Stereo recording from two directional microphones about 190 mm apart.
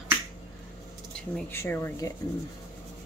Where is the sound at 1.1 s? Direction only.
10° left (ahead or behind).